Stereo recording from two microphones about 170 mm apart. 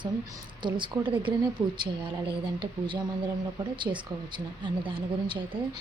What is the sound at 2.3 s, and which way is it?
Speech, 30° right (ahead or behind).